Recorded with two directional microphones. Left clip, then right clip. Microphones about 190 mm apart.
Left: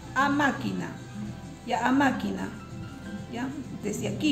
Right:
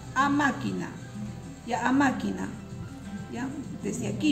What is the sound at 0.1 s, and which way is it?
A woman's voice, 25° left (ahead or behind).